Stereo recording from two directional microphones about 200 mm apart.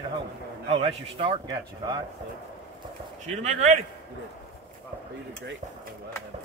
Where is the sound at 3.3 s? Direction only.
35° right (ahead or behind).